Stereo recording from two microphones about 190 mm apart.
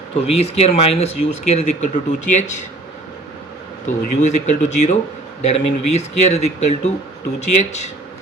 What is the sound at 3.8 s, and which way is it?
Speech, 40° left (ahead or behind).